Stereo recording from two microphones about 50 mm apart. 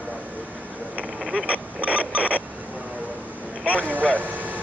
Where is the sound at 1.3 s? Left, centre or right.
Right.